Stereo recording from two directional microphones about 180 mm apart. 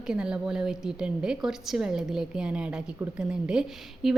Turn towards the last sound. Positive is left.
turn(degrees=-5)  # may be behind; listen again after turning